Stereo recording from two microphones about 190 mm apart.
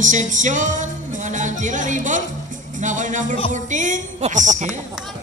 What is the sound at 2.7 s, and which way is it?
Music, 40° right (ahead or behind).